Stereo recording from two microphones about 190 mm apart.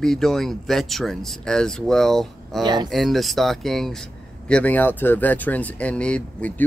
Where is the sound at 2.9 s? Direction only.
Centre (ahead or behind).